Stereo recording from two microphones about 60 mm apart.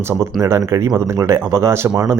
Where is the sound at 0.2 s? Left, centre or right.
Right.